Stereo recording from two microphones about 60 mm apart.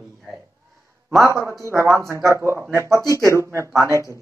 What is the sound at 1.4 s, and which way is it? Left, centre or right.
Speech, right.